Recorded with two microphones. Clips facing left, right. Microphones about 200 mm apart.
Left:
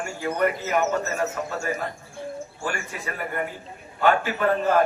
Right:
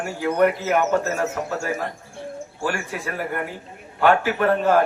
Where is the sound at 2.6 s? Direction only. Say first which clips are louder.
Right 5 dB; 60° right (ahead or behind).